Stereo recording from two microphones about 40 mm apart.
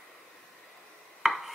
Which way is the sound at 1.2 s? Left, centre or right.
Centre.